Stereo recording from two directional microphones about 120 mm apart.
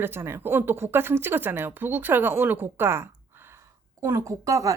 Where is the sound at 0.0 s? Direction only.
20° right (ahead or behind).